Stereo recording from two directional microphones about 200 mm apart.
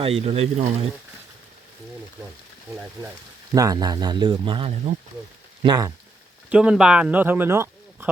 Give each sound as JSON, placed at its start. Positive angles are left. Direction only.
{"t": 0.0, "sound": "speech", "side_deg": -30}
{"t": 3.5, "sound": "speech", "side_deg": -15}
{"t": 6.5, "sound": "speech", "side_deg": -5}